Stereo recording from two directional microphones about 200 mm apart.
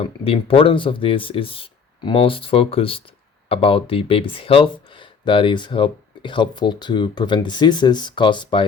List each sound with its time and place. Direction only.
0.0 s speech: 30° left (ahead or behind)